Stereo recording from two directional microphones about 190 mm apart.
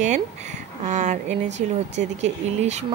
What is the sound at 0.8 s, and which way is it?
Speech, 40° right (ahead or behind).